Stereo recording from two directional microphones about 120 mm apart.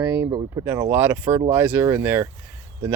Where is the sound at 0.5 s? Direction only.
25° right (ahead or behind).